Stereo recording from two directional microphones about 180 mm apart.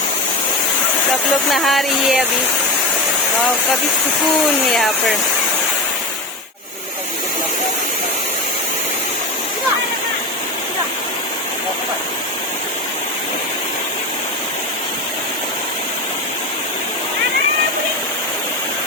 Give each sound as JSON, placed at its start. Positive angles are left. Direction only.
{"t": 1.5, "sound": "speech", "side_deg": 0}
{"t": 4.7, "sound": "speech", "side_deg": 0}